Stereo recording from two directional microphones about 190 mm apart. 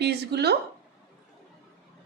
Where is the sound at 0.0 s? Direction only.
60° right (ahead or behind).